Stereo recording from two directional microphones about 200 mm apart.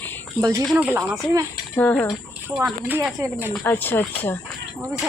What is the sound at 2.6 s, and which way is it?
Speech, 10° right (ahead or behind).